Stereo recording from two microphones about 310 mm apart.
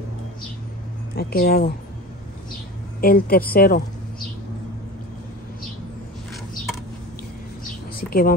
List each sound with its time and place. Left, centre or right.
1.1 s a woman's voice: left
3.0 s a woman's voice: left
8.0 s a woman's voice: left